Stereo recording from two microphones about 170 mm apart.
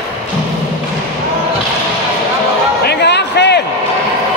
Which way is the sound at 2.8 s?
80° left.